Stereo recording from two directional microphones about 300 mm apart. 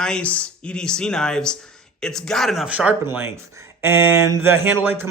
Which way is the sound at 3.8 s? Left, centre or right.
Centre.